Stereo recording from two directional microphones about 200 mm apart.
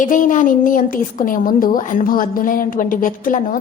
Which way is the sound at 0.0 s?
40° left (ahead or behind).